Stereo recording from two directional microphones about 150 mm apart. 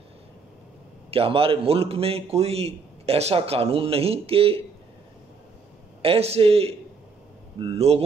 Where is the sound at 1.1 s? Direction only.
40° right (ahead or behind).